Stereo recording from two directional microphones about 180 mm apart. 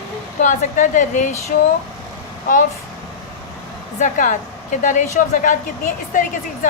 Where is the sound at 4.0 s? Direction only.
45° left (ahead or behind).